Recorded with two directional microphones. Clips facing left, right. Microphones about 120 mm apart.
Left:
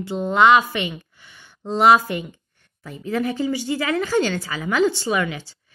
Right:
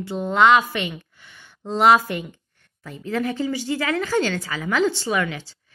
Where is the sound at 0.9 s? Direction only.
5° left (ahead or behind).